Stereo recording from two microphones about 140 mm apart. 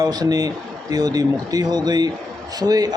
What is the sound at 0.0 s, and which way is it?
Speech, 30° right (ahead or behind).